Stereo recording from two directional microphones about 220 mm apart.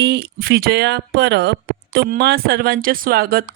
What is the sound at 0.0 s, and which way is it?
Speech, 50° right (ahead or behind).